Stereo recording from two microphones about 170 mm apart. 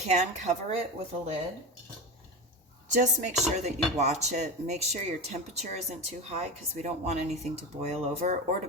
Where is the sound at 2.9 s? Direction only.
50° right (ahead or behind).